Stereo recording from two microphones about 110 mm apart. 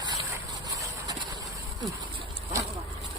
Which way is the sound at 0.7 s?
35° right (ahead or behind).